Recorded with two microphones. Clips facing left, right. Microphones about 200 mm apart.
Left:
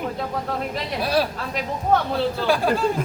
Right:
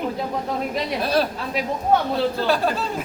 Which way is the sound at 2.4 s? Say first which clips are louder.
Left 2 dB; 10° left (ahead or behind).